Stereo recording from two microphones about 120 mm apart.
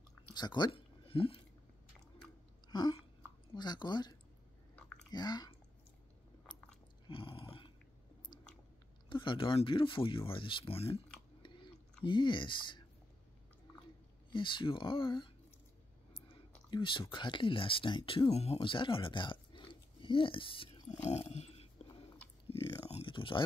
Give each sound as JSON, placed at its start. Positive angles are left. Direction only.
{"t": 0.3, "sound": "speech", "side_deg": 35}
{"t": 2.7, "sound": "hiccup", "side_deg": 35}
{"t": 3.5, "sound": "speech", "side_deg": 40}
{"t": 7.1, "sound": "a sound", "side_deg": 50}
{"t": 9.1, "sound": "speech", "side_deg": 45}
{"t": 12.0, "sound": "speech", "side_deg": 40}
{"t": 14.3, "sound": "speech", "side_deg": 45}
{"t": 20.9, "sound": "dog", "side_deg": 65}
{"t": 22.8, "sound": "a sound", "side_deg": 50}